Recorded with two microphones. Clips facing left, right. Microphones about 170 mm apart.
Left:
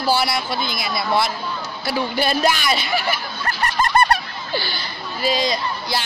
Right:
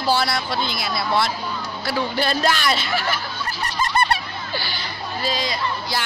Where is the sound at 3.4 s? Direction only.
65° left (ahead or behind); by 4.2 s 45° left (ahead or behind).